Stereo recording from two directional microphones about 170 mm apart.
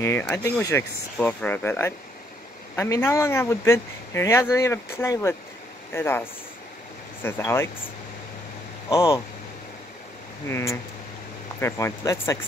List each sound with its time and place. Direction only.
0.0 s speech: 10° left (ahead or behind)
7.2 s speech: 15° left (ahead or behind)
8.8 s speech: 15° left (ahead or behind)
10.5 s speech: 15° left (ahead or behind)